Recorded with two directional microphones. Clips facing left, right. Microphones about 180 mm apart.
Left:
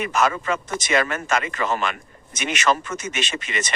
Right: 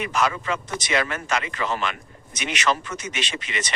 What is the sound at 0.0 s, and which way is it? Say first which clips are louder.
Speech: left 2 dB; 50° left (ahead or behind).